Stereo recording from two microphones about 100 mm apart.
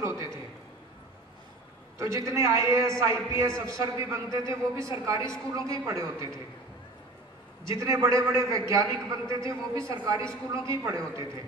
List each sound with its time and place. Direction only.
0.0 s a sound: 30° right (ahead or behind)
2.0 s a man's voice: 35° right (ahead or behind)
7.6 s a man's voice: 30° right (ahead or behind)